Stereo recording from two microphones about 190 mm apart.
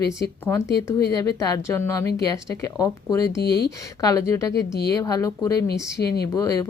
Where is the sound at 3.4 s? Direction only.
55° left (ahead or behind).